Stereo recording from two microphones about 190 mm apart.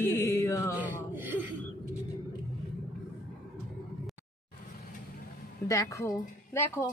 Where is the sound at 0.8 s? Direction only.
10° right (ahead or behind).